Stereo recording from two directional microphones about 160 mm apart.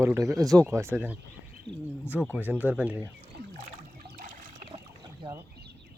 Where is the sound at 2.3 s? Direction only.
10° right (ahead or behind).